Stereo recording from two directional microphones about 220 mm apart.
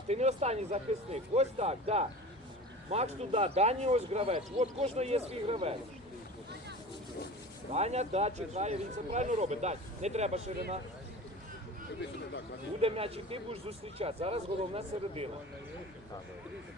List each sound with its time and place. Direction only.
0.1 s speech: 30° right (ahead or behind)
7.7 s speech: 30° right (ahead or behind)
12.8 s speech: 25° right (ahead or behind)